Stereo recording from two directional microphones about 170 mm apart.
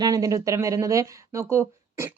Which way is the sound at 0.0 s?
20° right (ahead or behind).